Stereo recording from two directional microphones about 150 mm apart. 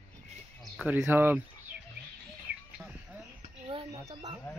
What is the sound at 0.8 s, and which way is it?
Speech, 15° right (ahead or behind).